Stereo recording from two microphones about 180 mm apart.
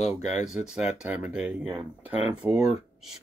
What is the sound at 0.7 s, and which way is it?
Speech, 10° right (ahead or behind).